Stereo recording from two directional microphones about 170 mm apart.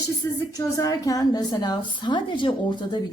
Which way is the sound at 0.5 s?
20° left (ahead or behind).